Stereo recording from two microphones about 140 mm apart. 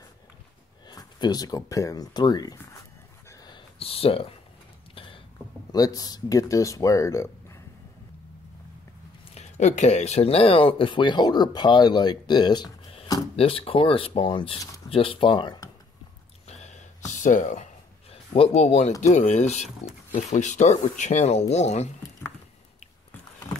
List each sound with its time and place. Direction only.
0.8 s speech: 30° left (ahead or behind)
3.4 s a sound: 40° left (ahead or behind)
5.7 s speech: 25° left (ahead or behind)
9.3 s speech: 55° left (ahead or behind); by 15.7 s 30° left (ahead or behind)
16.4 s a sound: 50° left (ahead or behind)
18.1 s speech: 45° left (ahead or behind)